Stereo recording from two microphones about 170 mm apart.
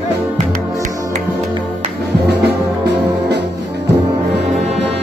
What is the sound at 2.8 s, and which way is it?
Music, 90° right.